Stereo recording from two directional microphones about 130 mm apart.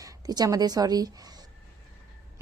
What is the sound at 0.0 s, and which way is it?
A woman's voice, 25° right (ahead or behind).